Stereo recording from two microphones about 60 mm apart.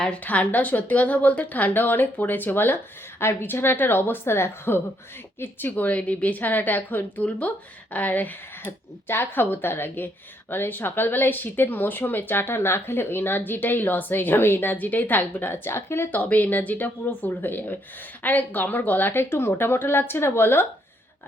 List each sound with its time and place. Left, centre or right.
0.2 s a woman's voice: left
16.1 s speech: left